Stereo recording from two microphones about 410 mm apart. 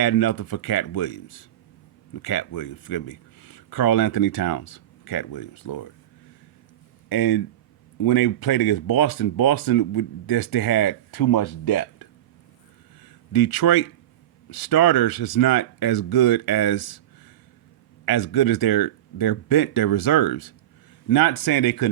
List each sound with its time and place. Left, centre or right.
0.0 s speech: left
7.1 s speech: left
18.0 s speech: left